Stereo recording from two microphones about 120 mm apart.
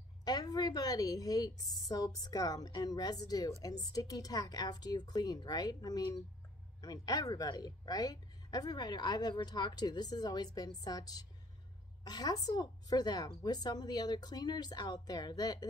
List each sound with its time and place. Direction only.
0.2 s a woman's voice: 35° left (ahead or behind)